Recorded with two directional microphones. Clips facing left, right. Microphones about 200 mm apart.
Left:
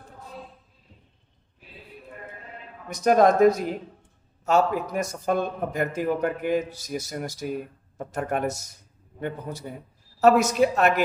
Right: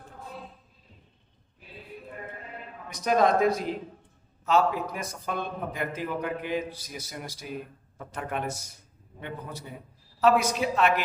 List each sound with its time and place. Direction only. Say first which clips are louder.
2.9 s a man's voice: left 5 dB; 50° left (ahead or behind)